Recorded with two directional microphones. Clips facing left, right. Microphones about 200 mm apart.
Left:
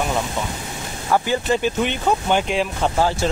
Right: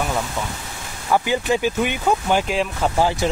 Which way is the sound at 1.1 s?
15° right (ahead or behind).